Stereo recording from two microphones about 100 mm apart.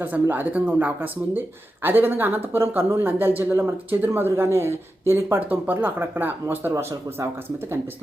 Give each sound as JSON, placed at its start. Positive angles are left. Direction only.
{"t": 0.0, "sound": "speech", "side_deg": -20}